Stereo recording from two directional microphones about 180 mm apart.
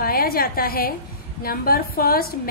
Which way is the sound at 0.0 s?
55° left (ahead or behind).